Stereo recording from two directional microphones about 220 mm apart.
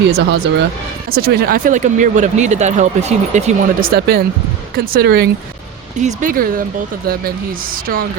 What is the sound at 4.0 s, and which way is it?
Speech, 45° right (ahead or behind).